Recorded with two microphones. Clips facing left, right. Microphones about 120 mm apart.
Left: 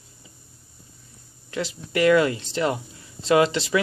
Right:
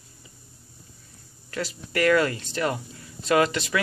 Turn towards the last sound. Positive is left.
turn(degrees=25)  # may be behind; listen again after turning